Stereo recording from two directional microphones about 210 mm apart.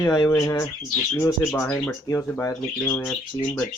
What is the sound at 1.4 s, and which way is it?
Speech, centre (ahead or behind).